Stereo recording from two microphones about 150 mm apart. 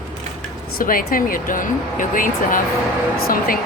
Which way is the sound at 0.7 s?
70° left (ahead or behind).